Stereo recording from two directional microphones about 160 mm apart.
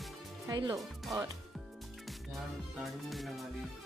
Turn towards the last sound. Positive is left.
turn(degrees=0)  # may be behind; listen again after turning